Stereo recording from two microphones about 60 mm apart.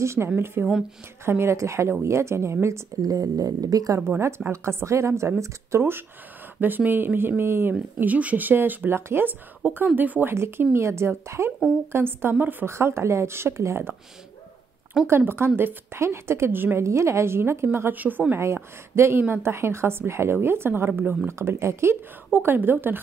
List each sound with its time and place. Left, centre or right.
0.0 s a woman's voice: right
0.6 s a woman's voice: right
3.0 s speech: right
4.5 s a woman's voice: right
8.0 s a woman's voice: right
10.6 s a woman's voice: right
12.6 s a woman's voice: right
15.0 s a woman's voice: right
16.8 s a woman's voice: right
17.9 s a woman's voice: right
18.4 s a woman's voice: right
22.3 s a woman's voice: right